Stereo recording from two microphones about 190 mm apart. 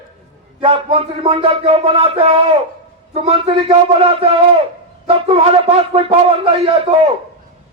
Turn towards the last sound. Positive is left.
turn(degrees=-30)  # may be behind; listen again after turning